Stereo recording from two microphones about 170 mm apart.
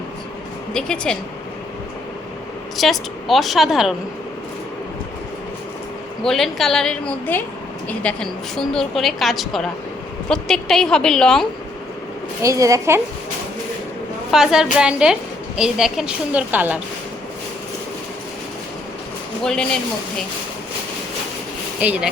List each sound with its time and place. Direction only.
0.7 s a woman's voice: 5° left (ahead or behind)
2.7 s a woman's voice: centre (ahead or behind)
6.2 s a woman's voice: centre (ahead or behind)
12.4 s speech: 20° right (ahead or behind)
14.3 s a woman's voice: 5° right (ahead or behind)
21.8 s speech: 10° right (ahead or behind)